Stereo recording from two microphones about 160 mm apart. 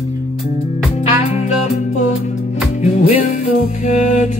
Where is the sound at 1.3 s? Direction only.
45° left (ahead or behind).